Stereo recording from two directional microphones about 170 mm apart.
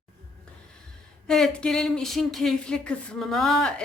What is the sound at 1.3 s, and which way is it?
Speech, 5° left (ahead or behind).